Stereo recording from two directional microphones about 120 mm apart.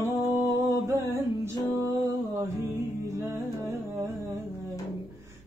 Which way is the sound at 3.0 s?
25° right (ahead or behind).